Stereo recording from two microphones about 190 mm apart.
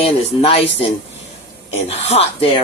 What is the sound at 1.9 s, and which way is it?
Speech, 35° left (ahead or behind).